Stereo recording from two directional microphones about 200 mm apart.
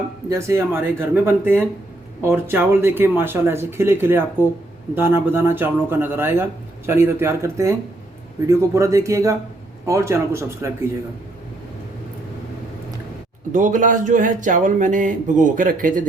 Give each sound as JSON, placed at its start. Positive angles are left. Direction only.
{"t": 0.3, "sound": "speech", "side_deg": -15}
{"t": 13.5, "sound": "speech", "side_deg": -40}